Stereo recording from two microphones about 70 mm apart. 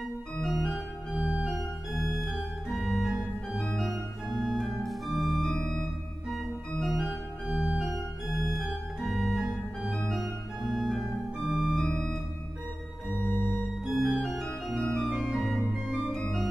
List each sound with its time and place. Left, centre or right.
0.5 s organ: centre
1.1 s organ: right
2.0 s organ: centre
5.5 s music: centre
6.3 s organ: centre
11.8 s organ: centre
13.2 s organ: left
13.8 s organ: centre